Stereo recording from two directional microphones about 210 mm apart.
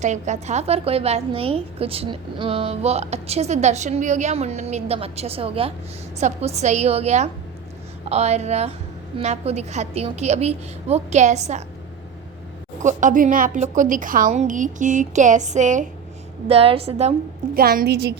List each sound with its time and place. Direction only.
0.0 s a woman's voice: 35° right (ahead or behind)
12.8 s a woman's voice: 35° right (ahead or behind)
17.5 s a woman's voice: 45° right (ahead or behind)